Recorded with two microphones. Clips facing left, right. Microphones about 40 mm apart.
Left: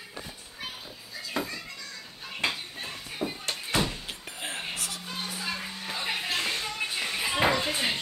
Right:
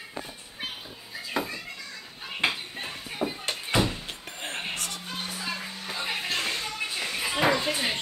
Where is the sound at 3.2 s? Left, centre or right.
Right.